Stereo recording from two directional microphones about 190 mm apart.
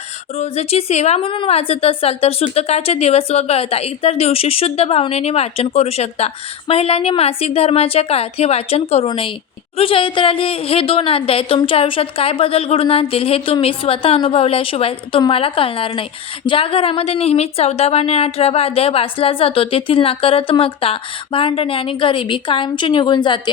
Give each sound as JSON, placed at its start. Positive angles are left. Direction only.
{"t": 0.3, "sound": "a woman's voice", "side_deg": 30}